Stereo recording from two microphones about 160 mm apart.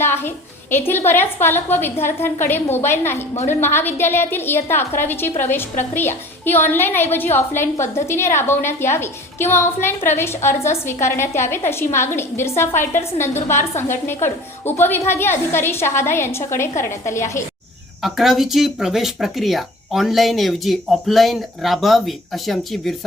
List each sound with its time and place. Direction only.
0.0 s a woman's voice: 15° left (ahead or behind)
18.0 s speech: centre (ahead or behind)